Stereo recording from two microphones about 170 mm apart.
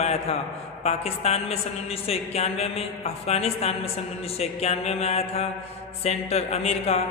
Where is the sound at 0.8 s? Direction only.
40° left (ahead or behind).